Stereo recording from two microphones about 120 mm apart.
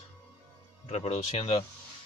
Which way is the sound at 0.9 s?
60° left (ahead or behind).